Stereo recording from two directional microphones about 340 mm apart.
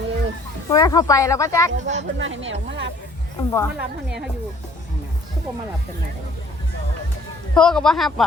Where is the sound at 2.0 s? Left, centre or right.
Right.